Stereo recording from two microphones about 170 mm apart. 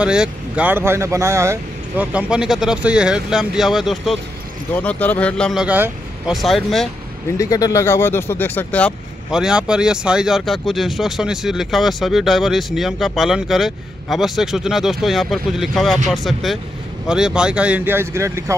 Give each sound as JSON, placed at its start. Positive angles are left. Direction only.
{"t": 0.0, "sound": "speech", "side_deg": -5}
{"t": 7.3, "sound": "speech", "side_deg": 20}
{"t": 9.3, "sound": "speech", "side_deg": -5}